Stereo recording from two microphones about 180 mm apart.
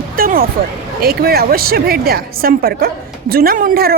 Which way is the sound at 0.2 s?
55° right (ahead or behind).